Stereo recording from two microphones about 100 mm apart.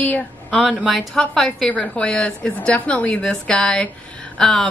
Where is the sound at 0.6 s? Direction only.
Centre (ahead or behind).